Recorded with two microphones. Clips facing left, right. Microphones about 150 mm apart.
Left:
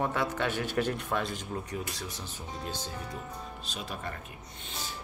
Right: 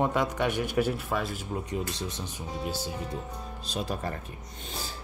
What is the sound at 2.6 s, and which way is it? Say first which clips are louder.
Speech: right 5 dB; 10° right (ahead or behind).